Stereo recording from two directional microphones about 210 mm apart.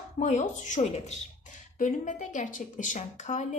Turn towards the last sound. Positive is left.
turn(degrees=35)  # may be behind; listen again after turning